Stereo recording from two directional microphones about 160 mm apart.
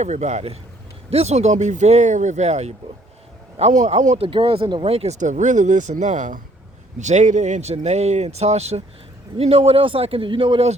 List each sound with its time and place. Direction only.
0.0 s a man's voice: 45° right (ahead or behind)